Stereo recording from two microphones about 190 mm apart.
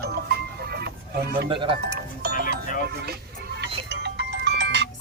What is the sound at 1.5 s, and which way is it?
Speech, 25° right (ahead or behind).